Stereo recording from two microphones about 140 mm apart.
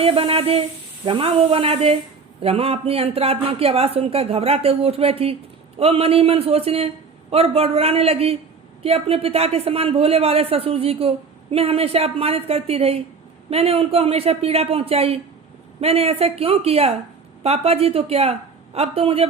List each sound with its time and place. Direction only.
0.0 s speech: 40° right (ahead or behind)